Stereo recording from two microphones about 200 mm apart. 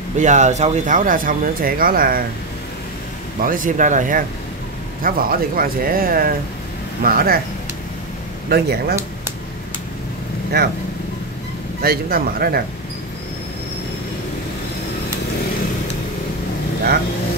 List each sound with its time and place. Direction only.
0.2 s speech: 35° right (ahead or behind)
3.3 s speech: 45° right (ahead or behind)
8.5 s speech: 50° right (ahead or behind)
10.5 s speech: 55° right (ahead or behind)
11.8 s speech: 50° right (ahead or behind)